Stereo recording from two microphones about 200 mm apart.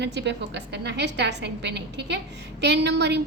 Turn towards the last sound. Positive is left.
turn(degrees=-60)  # may be behind; listen again after turning